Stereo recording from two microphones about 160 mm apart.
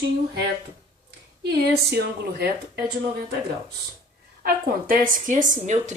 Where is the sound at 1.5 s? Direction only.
80° right.